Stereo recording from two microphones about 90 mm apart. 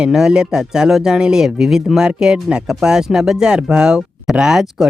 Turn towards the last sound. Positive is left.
turn(degrees=-5)  # may be behind; listen again after turning